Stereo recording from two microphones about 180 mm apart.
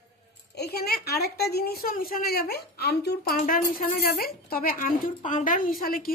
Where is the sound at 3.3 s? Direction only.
50° left (ahead or behind).